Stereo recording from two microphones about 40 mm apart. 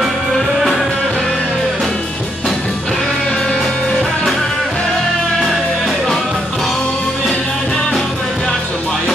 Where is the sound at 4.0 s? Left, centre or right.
Centre.